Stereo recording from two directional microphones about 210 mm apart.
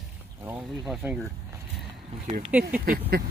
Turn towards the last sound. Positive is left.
turn(degrees=-45)  # may be behind; listen again after turning